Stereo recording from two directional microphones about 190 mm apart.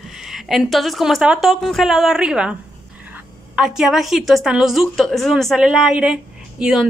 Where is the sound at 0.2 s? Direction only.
Centre (ahead or behind).